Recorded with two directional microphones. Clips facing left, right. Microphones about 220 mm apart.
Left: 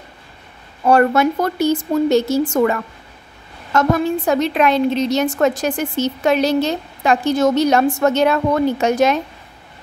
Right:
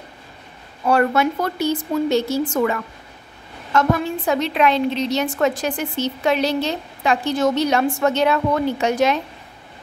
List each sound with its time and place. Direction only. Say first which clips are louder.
0.8 s a woman's voice: left 4 dB; 45° left (ahead or behind)